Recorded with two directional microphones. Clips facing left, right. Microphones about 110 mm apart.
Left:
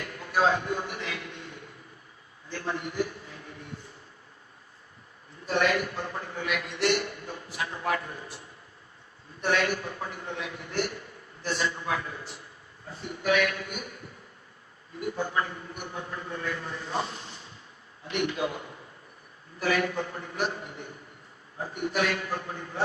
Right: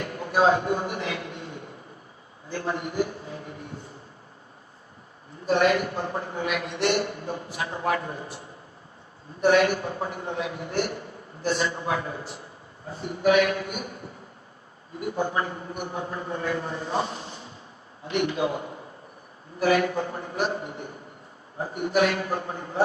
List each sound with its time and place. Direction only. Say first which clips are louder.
0.0 s a sound: right 4 dB; 30° right (ahead or behind)
2.5 s a man's voice: right 4 dB; 30° right (ahead or behind)
5.5 s a man's voice: right 5 dB; 25° right (ahead or behind)
9.4 s a man's voice: right 7 dB; 25° right (ahead or behind)
15.0 s a man's voice: right 3 dB; 25° right (ahead or behind)